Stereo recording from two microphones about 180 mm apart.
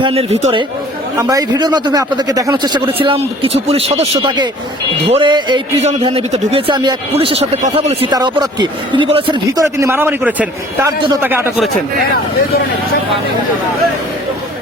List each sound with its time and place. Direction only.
0.0 s speech: 35° right (ahead or behind)
1.1 s speech: 20° right (ahead or behind); by 7.9 s 35° right (ahead or behind)
8.1 s speech: 20° right (ahead or behind)
10.8 s speech: 25° right (ahead or behind)
11.2 s speech: 10° right (ahead or behind)